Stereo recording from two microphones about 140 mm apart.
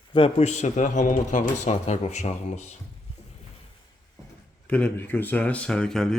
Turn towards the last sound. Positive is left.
turn(degrees=5)  # may be behind; listen again after turning